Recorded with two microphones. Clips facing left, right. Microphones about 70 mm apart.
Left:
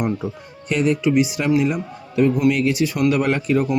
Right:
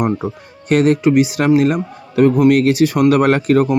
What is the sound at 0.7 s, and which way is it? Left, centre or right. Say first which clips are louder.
Speech: right 6 dB; right.